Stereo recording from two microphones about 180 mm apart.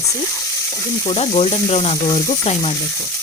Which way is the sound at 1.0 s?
35° left (ahead or behind).